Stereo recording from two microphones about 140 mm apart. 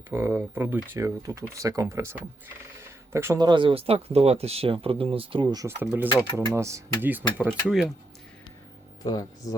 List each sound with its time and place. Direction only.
0.1 s speech: 15° right (ahead or behind)
3.3 s speech: 30° right (ahead or behind)
5.6 s speech: 15° right (ahead or behind)
9.0 s speech: 30° left (ahead or behind)